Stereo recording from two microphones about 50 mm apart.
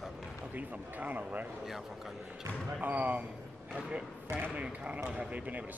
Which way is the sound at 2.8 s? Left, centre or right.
Right.